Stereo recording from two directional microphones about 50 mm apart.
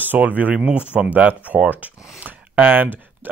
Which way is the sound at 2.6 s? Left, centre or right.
Right.